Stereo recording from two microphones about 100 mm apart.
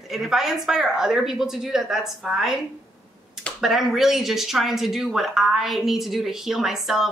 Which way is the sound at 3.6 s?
5° right (ahead or behind).